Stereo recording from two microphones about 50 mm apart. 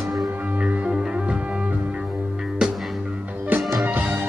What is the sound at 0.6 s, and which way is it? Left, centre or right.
Music, right.